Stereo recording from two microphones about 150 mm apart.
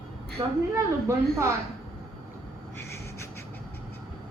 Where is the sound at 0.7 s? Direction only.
20° right (ahead or behind).